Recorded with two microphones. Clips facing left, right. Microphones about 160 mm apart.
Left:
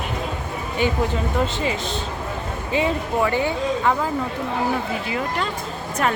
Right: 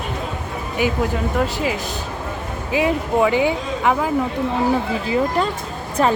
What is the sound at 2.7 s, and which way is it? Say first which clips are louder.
Speech: right 3 dB; 10° right (ahead or behind).